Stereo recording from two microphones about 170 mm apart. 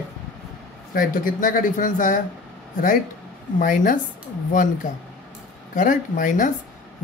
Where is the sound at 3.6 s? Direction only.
55° left (ahead or behind).